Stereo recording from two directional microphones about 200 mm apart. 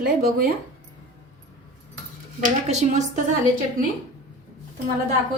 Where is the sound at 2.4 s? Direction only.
35° right (ahead or behind).